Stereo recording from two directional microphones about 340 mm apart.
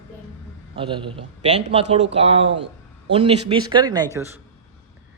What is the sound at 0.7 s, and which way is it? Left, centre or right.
A man's voice, centre.